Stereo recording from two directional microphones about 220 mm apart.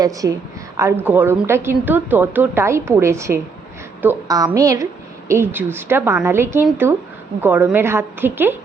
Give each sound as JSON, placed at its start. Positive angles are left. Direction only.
{"t": 0.0, "sound": "a woman's voice", "side_deg": -15}